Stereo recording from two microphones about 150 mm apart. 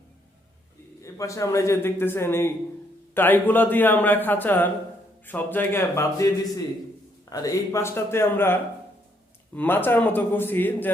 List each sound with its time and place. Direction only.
1.0 s a man's voice: 20° left (ahead or behind)
9.6 s a man's voice: 15° left (ahead or behind)